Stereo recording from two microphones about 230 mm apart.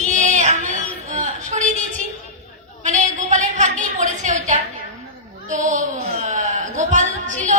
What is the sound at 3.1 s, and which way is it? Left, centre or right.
A woman's voice, right.